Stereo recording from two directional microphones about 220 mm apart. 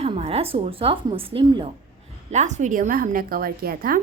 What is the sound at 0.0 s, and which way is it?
A woman's voice, 25° right (ahead or behind).